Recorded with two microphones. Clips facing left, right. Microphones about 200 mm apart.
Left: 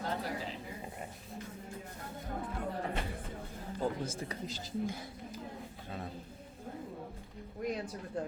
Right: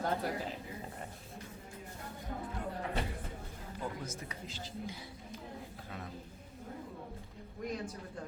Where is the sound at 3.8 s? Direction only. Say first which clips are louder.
Left 6 dB; 35° left (ahead or behind).